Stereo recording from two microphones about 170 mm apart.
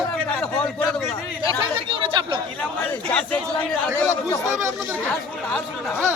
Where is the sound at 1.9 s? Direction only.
30° right (ahead or behind).